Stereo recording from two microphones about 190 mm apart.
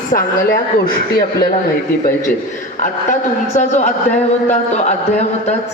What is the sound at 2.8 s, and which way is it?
A man's voice, 40° left (ahead or behind).